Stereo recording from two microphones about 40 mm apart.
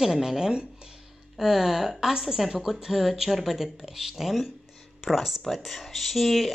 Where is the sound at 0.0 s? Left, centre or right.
Centre.